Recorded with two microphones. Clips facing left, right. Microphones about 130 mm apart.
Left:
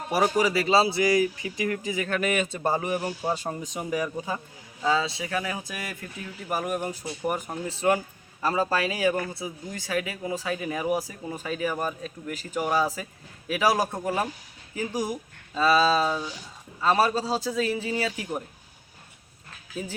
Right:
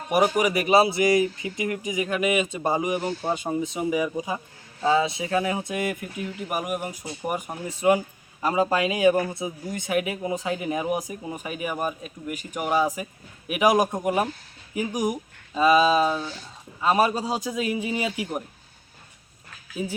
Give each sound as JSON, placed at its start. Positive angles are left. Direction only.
{"t": 0.1, "sound": "a man's voice", "side_deg": -20}
{"t": 3.0, "sound": "a man's voice", "side_deg": 10}
{"t": 3.3, "sound": "a man's voice", "side_deg": -10}
{"t": 16.1, "sound": "a man's voice", "side_deg": 15}
{"t": 16.8, "sound": "a man's voice", "side_deg": -15}